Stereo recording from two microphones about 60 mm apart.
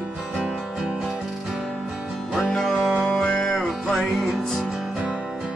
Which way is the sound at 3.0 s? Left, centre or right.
Centre.